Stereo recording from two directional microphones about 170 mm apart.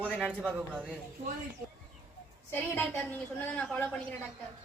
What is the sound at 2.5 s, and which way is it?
A man's voice, 10° left (ahead or behind).